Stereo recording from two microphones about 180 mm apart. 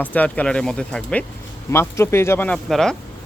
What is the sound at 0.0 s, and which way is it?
Speech, 10° left (ahead or behind).